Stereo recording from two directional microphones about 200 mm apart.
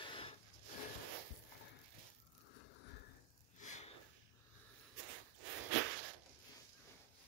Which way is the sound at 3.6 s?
35° left (ahead or behind).